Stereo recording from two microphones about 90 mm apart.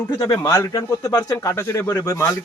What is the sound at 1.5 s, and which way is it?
Speech, 30° left (ahead or behind).